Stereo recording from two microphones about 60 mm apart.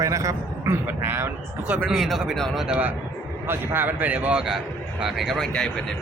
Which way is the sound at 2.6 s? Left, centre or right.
Right.